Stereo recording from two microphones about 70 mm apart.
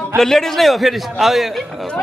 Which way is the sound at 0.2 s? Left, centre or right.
Centre.